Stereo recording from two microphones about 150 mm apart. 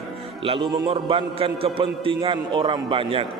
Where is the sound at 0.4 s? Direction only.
35° right (ahead or behind).